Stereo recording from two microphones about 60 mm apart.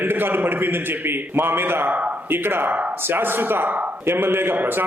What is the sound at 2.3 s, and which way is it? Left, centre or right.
A man's voice, right.